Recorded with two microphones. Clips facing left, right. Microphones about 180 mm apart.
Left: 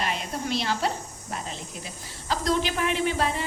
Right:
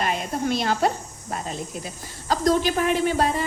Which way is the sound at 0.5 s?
50° right (ahead or behind).